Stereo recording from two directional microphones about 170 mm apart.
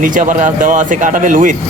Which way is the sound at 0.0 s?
50° right (ahead or behind).